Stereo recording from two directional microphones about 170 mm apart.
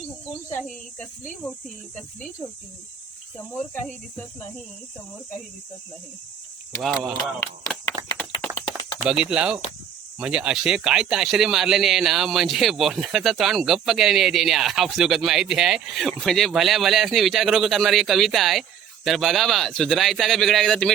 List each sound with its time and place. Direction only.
0.9 s speech: 50° left (ahead or behind)
6.8 s a man's voice: centre (ahead or behind)
7.3 s speech: 20° left (ahead or behind)
7.9 s a sound: 20° left (ahead or behind)
9.0 s a man's voice: 5° right (ahead or behind)